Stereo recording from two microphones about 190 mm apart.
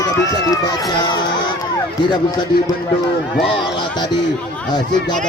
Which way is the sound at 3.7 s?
25° left (ahead or behind).